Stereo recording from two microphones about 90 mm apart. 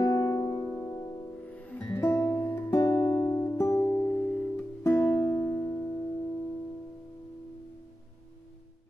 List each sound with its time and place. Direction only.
0.0 s music: 35° left (ahead or behind)
0.7 s music: 20° left (ahead or behind)
2.8 s music: 40° left (ahead or behind)
3.1 s music: 25° left (ahead or behind)
4.0 s music: 15° left (ahead or behind)
4.8 s music: 25° left (ahead or behind)